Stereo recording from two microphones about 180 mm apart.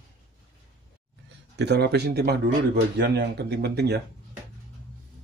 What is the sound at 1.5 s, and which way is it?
Speech, 70° right (ahead or behind).